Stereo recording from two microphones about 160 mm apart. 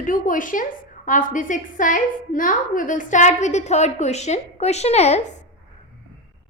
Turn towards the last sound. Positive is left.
turn(degrees=45)  # may be behind; listen again after turning